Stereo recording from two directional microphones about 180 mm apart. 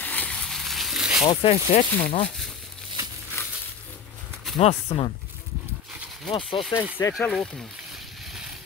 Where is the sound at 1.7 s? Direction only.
45° left (ahead or behind).